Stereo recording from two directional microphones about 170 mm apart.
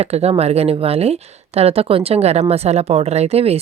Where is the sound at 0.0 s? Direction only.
40° right (ahead or behind).